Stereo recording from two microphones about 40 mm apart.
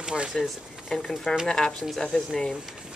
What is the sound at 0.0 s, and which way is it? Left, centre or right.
Speech, right.